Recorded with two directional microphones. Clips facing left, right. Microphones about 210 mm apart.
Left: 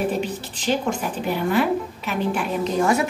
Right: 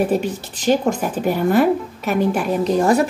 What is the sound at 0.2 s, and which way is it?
A woman's voice, 45° right (ahead or behind).